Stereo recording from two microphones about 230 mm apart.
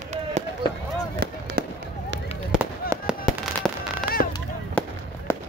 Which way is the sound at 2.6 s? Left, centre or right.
Centre.